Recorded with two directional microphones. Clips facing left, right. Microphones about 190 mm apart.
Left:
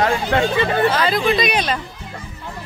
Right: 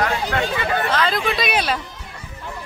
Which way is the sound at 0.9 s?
5° left (ahead or behind).